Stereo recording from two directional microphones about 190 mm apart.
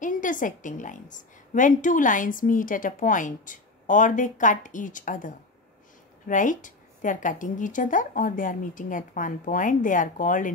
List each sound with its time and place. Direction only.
0.0 s a woman's voice: 45° left (ahead or behind)